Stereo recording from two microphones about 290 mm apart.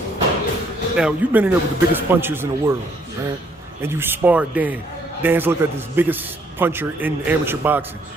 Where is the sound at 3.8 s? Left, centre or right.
Centre.